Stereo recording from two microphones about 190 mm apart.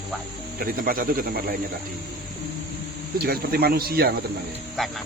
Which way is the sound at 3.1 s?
55° right (ahead or behind).